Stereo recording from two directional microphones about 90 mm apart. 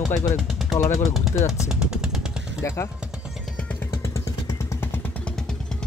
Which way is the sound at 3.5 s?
20° left (ahead or behind).